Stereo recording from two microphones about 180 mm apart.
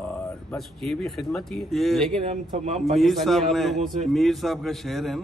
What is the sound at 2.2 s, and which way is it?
Speech, 35° right (ahead or behind).